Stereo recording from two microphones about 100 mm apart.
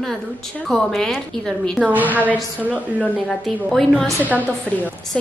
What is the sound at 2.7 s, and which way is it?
Speech, 15° left (ahead or behind).